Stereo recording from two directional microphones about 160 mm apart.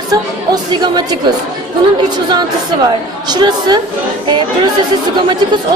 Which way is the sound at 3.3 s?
25° right (ahead or behind).